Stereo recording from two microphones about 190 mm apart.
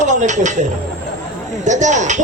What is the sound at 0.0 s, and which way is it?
Speech, 40° right (ahead or behind).